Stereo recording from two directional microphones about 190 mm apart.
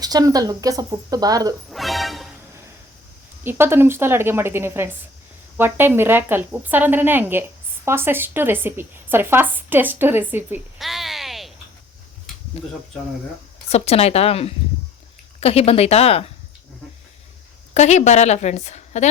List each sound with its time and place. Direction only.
0.0 s speech: 20° right (ahead or behind)
1.7 s music: centre (ahead or behind)
3.4 s speech: 10° right (ahead or behind)
10.8 s a sound: centre (ahead or behind)
12.6 s a woman's voice: 30° left (ahead or behind)
17.7 s a woman's voice: 35° left (ahead or behind)